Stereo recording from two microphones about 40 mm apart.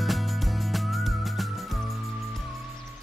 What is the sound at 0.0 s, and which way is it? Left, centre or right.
Music, centre.